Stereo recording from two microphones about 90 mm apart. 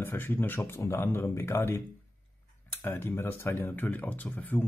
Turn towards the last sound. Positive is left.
turn(degrees=15)  # may be behind; listen again after turning